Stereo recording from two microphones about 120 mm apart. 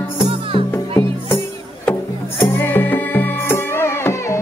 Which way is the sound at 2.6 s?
15° left (ahead or behind).